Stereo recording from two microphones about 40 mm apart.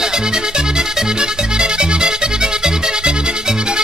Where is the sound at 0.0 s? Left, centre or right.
Centre.